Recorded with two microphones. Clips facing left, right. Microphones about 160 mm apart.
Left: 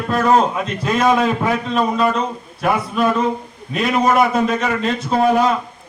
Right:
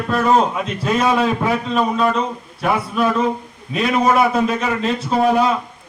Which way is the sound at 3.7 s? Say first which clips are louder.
Even; centre (ahead or behind).